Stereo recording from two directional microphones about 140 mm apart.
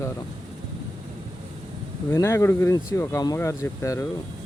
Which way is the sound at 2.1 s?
20° left (ahead or behind).